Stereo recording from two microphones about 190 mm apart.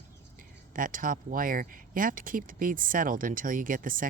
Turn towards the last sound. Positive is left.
turn(degrees=-45)  # may be behind; listen again after turning